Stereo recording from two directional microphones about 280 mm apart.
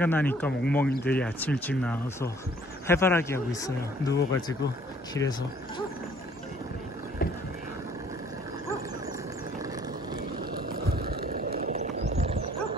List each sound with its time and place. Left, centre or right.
0.0 s speech: centre
10.9 s a sound: right
12.2 s dog: right